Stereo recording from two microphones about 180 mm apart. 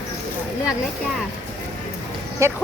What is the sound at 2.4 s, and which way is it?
Speech, 15° right (ahead or behind).